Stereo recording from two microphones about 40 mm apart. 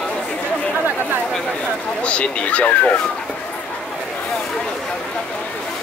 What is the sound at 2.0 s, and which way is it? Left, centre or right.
Speech, left.